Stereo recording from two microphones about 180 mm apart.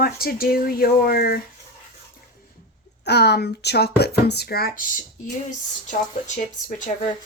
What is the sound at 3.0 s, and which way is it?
Speech, 65° left (ahead or behind).